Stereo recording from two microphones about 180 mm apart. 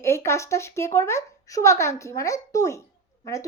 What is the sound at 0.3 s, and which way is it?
A woman's voice, 15° left (ahead or behind).